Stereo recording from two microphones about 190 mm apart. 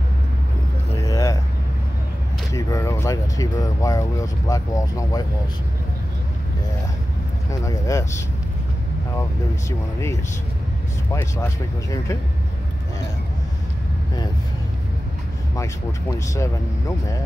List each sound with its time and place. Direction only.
1.0 s vehicle: 15° left (ahead or behind)
2.5 s speech: 15° left (ahead or behind)
7.6 s speech: 15° left (ahead or behind)
15.5 s speech: 15° left (ahead or behind)